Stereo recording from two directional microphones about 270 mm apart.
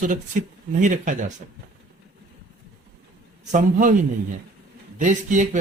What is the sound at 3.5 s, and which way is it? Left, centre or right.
Speech, right.